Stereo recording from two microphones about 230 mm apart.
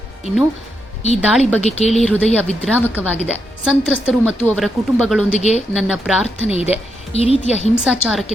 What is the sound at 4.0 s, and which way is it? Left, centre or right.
Speech, centre.